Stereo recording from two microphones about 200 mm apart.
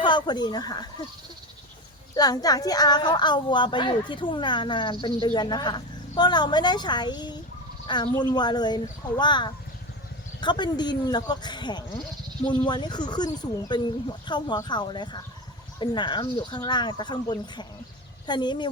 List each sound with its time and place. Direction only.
0.0 s speech: 20° left (ahead or behind)
2.1 s a woman's voice: 20° left (ahead or behind)